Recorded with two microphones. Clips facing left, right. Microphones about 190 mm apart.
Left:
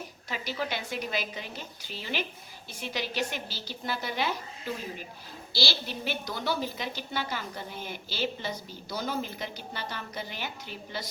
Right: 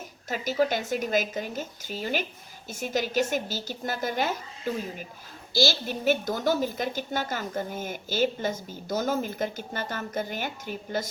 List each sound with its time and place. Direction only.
0.3 s a woman's voice: 45° right (ahead or behind)